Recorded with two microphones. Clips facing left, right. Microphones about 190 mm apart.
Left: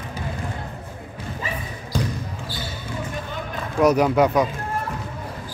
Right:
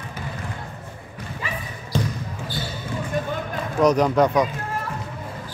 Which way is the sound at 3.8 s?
5° left (ahead or behind).